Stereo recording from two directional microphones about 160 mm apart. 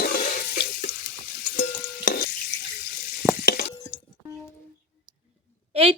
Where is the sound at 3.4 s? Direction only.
65° left (ahead or behind).